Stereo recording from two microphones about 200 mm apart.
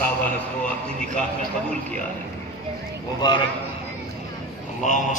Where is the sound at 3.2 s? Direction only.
20° left (ahead or behind).